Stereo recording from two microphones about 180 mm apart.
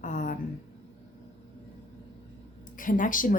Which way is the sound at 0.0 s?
45° left (ahead or behind).